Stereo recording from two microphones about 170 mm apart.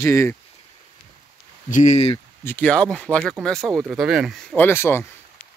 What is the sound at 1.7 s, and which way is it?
Speech, 45° left (ahead or behind).